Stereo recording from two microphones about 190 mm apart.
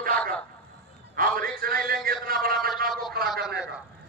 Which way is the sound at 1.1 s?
50° right (ahead or behind).